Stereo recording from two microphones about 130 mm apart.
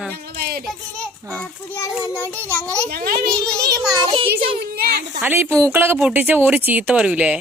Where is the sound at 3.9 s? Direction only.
35° right (ahead or behind).